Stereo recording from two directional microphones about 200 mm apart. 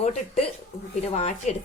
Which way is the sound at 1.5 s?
35° left (ahead or behind).